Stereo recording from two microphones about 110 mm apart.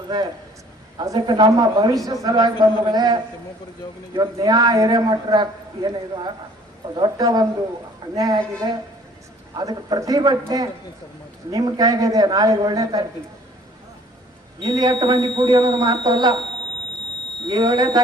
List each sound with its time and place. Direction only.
1.0 s a man's voice: 35° right (ahead or behind)
14.6 s a man's voice: 35° right (ahead or behind)
17.5 s a man's voice: 35° right (ahead or behind)